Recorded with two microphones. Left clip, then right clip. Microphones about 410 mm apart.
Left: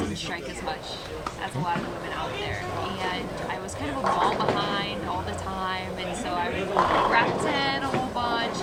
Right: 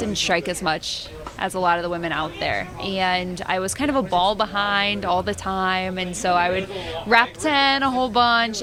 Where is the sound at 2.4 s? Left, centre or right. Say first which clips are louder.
Right 5 dB; right.